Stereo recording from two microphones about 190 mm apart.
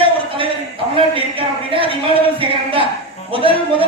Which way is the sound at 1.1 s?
30° right (ahead or behind).